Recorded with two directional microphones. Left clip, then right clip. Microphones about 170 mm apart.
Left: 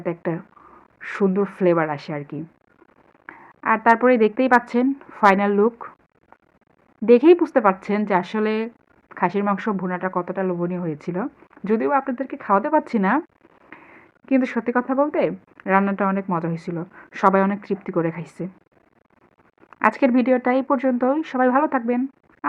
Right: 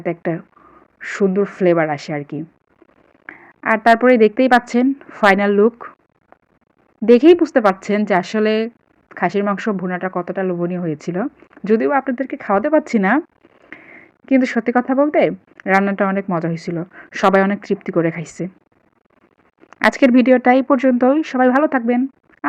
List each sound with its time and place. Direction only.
0.0 s a woman's voice: 30° right (ahead or behind)
7.0 s a woman's voice: 30° right (ahead or behind)
19.7 s a woman's voice: 35° right (ahead or behind)